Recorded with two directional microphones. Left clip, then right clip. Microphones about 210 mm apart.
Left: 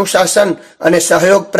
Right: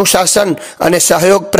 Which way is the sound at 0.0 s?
40° right (ahead or behind).